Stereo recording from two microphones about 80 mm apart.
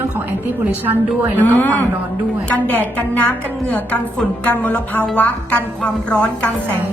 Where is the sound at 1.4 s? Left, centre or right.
Left.